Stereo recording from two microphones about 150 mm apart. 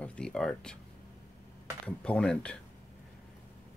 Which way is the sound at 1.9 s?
5° left (ahead or behind).